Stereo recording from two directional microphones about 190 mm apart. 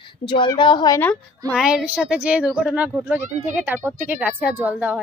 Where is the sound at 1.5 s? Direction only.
5° right (ahead or behind).